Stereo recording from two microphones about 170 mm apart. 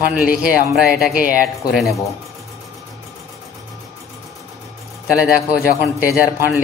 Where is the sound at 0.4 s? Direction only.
5° right (ahead or behind).